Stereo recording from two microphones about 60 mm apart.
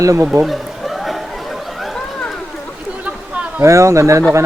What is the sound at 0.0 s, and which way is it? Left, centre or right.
Speech, right.